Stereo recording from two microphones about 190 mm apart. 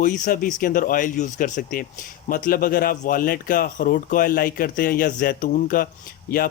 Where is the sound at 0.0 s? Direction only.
45° left (ahead or behind).